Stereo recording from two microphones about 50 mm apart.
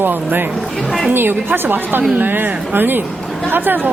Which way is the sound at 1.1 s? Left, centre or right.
Right.